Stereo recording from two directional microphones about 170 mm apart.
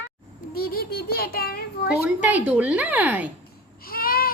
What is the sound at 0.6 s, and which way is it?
A child's voice, 65° left (ahead or behind).